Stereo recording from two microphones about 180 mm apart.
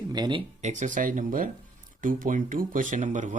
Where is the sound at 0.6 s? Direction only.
45° right (ahead or behind).